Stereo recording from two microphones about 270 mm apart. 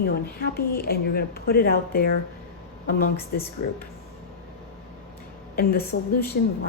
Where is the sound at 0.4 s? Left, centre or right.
Left.